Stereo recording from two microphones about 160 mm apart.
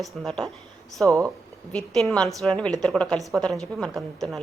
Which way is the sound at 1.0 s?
20° right (ahead or behind).